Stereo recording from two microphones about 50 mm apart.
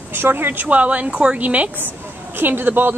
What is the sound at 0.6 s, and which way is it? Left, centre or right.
A woman's voice, right.